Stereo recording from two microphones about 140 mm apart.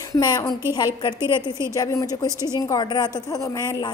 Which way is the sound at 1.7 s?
25° left (ahead or behind).